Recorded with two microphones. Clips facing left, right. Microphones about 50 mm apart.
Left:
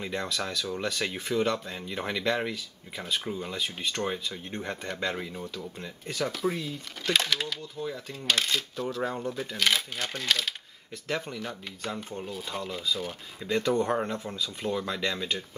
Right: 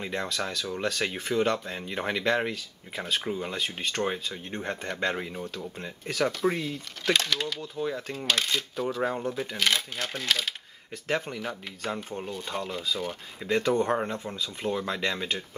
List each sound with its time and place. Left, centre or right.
0.0 s speech: centre
3.5 s speech: right
3.9 s speech: centre
6.5 s speech: centre
7.8 s speech: right
8.3 s speech: centre
8.8 s speech: centre